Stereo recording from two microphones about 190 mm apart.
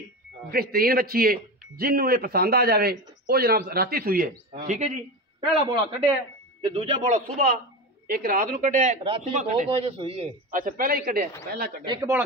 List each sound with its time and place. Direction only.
0.5 s a man's voice: 55° right (ahead or behind)
4.6 s a man's voice: 40° right (ahead or behind)
10.5 s a man's voice: 45° right (ahead or behind)
11.8 s a man's voice: 25° right (ahead or behind)